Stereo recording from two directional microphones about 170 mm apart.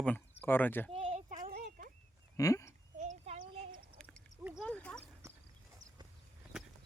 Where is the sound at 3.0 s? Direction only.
45° right (ahead or behind).